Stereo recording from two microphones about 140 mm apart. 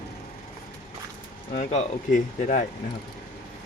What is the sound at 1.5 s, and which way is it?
Speech, 60° left (ahead or behind).